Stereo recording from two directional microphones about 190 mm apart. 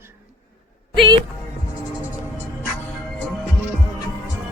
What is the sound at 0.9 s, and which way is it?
Speech, 25° right (ahead or behind).